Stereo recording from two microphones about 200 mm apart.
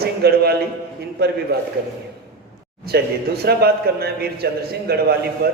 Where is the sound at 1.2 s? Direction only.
50° right (ahead or behind).